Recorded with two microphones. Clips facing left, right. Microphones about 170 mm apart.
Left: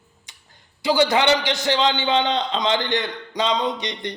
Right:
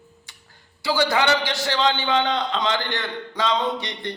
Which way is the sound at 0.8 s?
20° left (ahead or behind).